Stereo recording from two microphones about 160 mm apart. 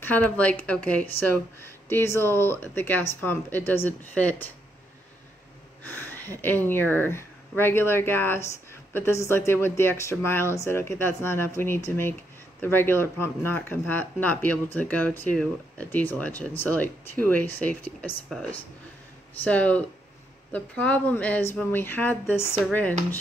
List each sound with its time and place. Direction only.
0.0 s speech: 10° left (ahead or behind)
5.9 s speech: 15° left (ahead or behind)